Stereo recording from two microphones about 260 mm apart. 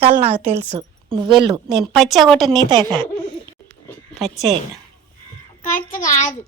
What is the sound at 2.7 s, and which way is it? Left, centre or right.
Speech, centre.